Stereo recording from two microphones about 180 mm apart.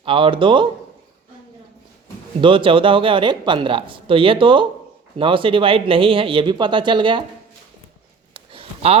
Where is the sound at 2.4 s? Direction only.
30° right (ahead or behind).